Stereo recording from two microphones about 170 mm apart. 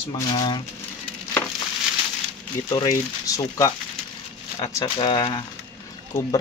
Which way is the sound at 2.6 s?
20° left (ahead or behind).